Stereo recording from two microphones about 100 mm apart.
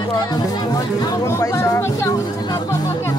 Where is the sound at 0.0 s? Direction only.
45° left (ahead or behind); by 2.1 s 30° left (ahead or behind).